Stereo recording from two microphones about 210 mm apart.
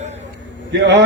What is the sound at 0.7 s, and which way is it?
Speech, 60° right (ahead or behind).